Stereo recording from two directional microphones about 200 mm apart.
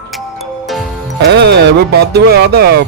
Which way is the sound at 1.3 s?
55° right (ahead or behind).